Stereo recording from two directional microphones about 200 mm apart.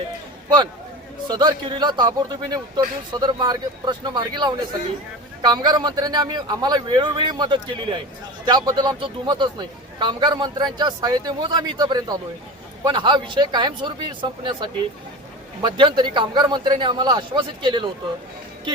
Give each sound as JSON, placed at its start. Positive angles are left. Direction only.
{"t": 1.3, "sound": "a man's voice", "side_deg": -20}